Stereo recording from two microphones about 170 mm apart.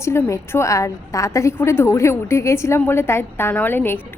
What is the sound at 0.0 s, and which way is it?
A woman's voice, 15° left (ahead or behind).